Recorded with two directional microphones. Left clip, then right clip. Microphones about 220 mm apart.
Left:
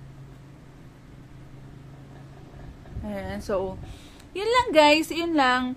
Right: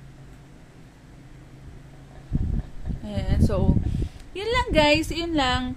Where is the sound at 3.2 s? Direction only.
10° right (ahead or behind).